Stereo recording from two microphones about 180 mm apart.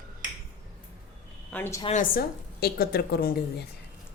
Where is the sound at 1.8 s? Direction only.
45° left (ahead or behind); by 3.6 s 60° left (ahead or behind).